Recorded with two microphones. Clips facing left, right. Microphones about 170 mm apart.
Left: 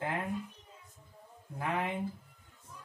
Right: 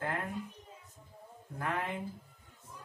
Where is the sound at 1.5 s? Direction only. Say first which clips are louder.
Left 1 dB; 20° left (ahead or behind).